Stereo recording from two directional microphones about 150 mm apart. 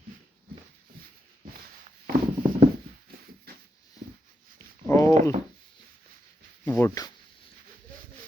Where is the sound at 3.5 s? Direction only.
90° right.